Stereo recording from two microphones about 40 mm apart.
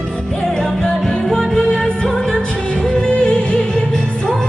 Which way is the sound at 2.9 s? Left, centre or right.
Left.